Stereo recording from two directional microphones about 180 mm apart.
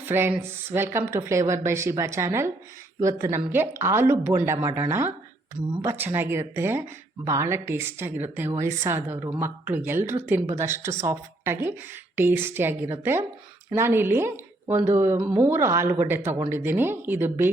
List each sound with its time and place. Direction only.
0.0 s a woman's voice: 10° right (ahead or behind)